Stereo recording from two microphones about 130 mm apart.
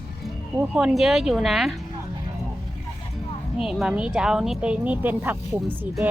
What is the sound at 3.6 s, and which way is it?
A woman's voice, 5° right (ahead or behind).